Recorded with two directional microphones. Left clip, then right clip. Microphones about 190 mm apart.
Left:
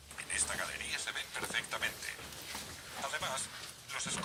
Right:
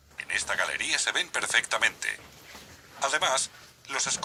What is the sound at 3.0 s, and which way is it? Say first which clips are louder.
Speech: right 12 dB; 55° right (ahead or behind).